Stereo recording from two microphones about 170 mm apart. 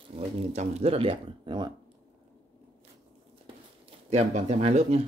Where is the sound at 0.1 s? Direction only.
40° right (ahead or behind).